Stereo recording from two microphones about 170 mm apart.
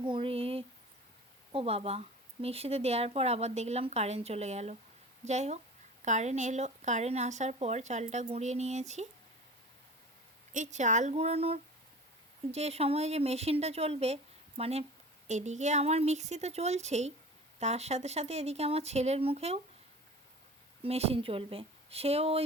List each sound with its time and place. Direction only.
0.0 s a sound: 30° right (ahead or behind)
1.5 s speech: 35° right (ahead or behind)
10.5 s speech: 45° right (ahead or behind)
20.8 s speech: 35° right (ahead or behind)